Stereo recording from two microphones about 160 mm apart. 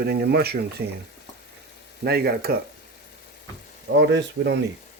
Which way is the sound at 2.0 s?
75° right (ahead or behind).